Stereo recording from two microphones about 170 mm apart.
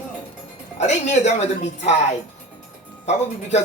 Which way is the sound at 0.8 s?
40° left (ahead or behind).